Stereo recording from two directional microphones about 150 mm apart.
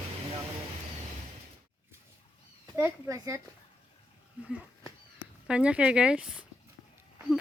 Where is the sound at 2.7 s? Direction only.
15° right (ahead or behind).